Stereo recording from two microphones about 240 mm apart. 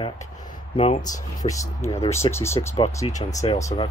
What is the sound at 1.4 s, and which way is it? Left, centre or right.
Speech, centre.